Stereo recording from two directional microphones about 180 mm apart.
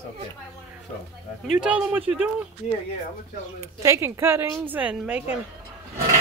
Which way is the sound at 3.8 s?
15° right (ahead or behind).